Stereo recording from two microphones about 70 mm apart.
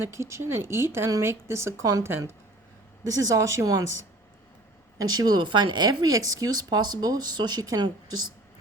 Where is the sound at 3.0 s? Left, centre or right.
Right.